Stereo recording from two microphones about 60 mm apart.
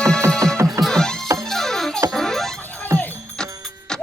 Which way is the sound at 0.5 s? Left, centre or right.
Right.